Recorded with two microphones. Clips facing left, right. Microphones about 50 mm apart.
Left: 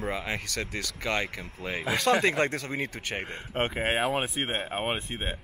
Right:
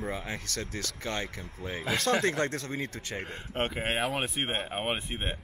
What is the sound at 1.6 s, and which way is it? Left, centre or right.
Speech, left.